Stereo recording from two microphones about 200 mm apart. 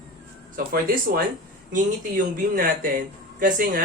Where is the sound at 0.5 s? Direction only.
50° right (ahead or behind).